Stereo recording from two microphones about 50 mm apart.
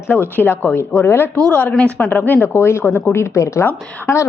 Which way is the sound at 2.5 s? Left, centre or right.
Left.